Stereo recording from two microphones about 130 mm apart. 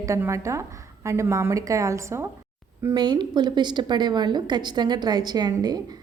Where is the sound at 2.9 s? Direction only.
35° right (ahead or behind).